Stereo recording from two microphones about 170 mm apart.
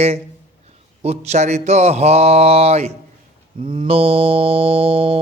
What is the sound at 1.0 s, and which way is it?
Music, 40° right (ahead or behind).